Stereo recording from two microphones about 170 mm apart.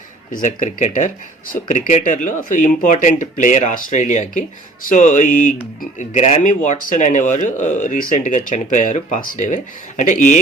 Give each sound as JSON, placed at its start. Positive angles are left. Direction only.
{"t": 0.4, "sound": "speech", "side_deg": 45}